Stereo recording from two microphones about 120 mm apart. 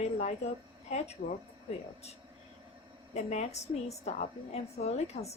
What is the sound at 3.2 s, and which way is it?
A woman's voice, 65° left (ahead or behind).